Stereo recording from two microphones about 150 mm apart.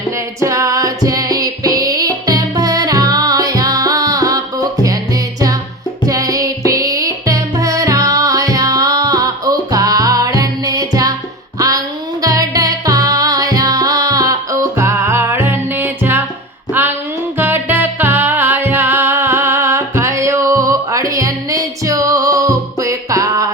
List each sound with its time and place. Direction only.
0.4 s music: 20° right (ahead or behind)
6.1 s music: 25° right (ahead or behind)
12.2 s music: 25° right (ahead or behind)
17.3 s music: 15° right (ahead or behind)